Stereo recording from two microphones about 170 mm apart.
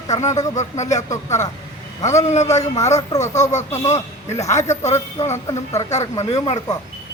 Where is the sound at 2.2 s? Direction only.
40° left (ahead or behind).